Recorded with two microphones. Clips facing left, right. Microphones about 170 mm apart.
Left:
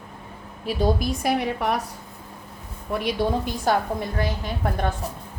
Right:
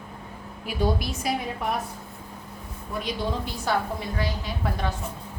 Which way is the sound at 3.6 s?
50° left (ahead or behind).